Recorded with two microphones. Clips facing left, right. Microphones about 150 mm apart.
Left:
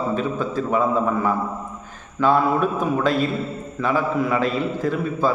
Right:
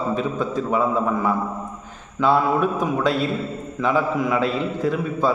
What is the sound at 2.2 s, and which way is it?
A man's voice, 10° right (ahead or behind).